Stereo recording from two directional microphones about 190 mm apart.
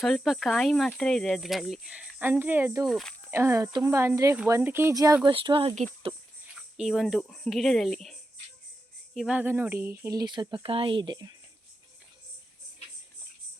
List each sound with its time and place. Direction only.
0.0 s speech: centre (ahead or behind)
2.8 s speech: centre (ahead or behind)
3.3 s speech: 15° right (ahead or behind); by 6.1 s 30° right (ahead or behind)
6.7 s speech: centre (ahead or behind); by 11.3 s 20° right (ahead or behind)